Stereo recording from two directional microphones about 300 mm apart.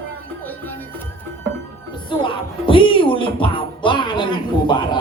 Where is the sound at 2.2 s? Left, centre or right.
Centre.